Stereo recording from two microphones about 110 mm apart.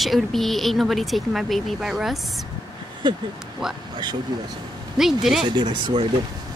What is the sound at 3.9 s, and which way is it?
Speech, 40° right (ahead or behind).